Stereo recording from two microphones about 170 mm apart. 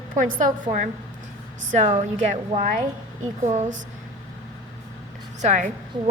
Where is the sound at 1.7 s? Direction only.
45° right (ahead or behind).